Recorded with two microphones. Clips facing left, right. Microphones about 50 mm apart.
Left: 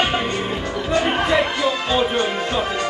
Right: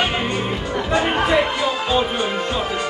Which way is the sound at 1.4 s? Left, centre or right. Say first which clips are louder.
Even; centre.